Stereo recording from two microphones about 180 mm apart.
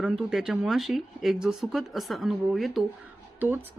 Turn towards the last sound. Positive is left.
turn(degrees=-10)  # may be behind; listen again after turning